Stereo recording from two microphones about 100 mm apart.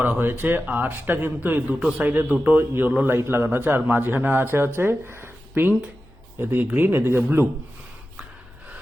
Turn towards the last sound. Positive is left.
turn(degrees=-25)  # may be behind; listen again after turning